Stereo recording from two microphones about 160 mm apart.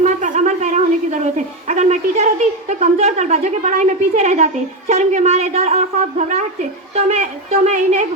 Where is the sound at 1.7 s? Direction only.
45° right (ahead or behind).